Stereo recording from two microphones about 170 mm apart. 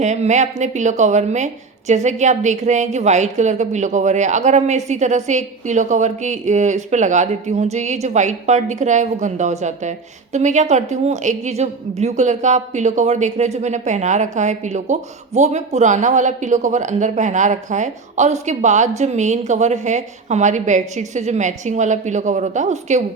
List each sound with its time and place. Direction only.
0.0 s a woman's voice: 45° right (ahead or behind)